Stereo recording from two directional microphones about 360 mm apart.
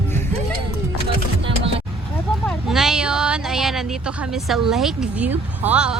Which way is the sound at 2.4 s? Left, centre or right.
Centre.